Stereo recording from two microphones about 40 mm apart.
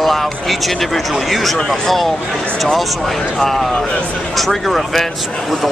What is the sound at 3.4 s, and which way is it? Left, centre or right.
Speech, centre.